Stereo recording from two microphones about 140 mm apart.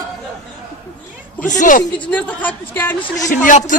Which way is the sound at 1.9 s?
10° left (ahead or behind).